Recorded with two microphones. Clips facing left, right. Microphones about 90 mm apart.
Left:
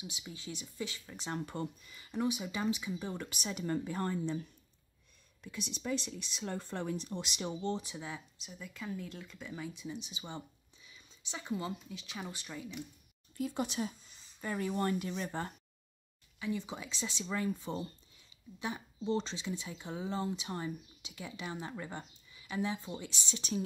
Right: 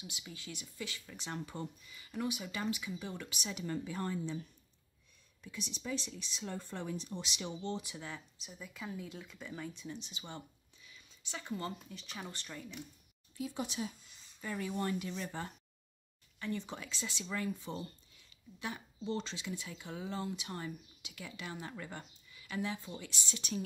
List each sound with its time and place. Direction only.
0.0 s speech: 20° left (ahead or behind)
1.4 s speech: 55° left (ahead or behind)
2.0 s speech: 25° left (ahead or behind)
3.1 s speech: 40° left (ahead or behind)
5.4 s speech: 60° left (ahead or behind); by 8.0 s 35° left (ahead or behind)
8.4 s speech: centre (ahead or behind)
13.4 s speech: 50° left (ahead or behind)
14.4 s speech: 40° left (ahead or behind)
16.3 s speech: 5° left (ahead or behind)
16.9 s speech: 20° left (ahead or behind)